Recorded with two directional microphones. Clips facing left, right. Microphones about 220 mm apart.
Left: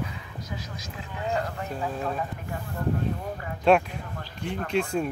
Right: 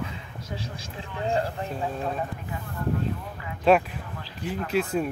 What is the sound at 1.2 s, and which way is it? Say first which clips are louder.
Speech: right 3 dB; 30° right (ahead or behind).